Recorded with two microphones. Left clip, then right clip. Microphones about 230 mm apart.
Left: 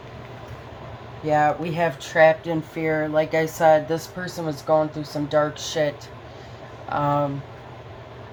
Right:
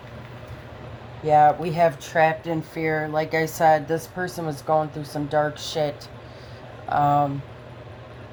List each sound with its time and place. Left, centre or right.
1.2 s speech: right
6.9 s speech: right